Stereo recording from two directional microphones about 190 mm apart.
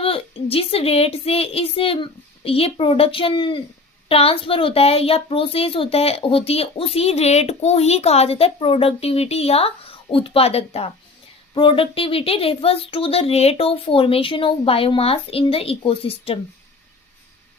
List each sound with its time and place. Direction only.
0.0 s a woman's voice: 30° left (ahead or behind)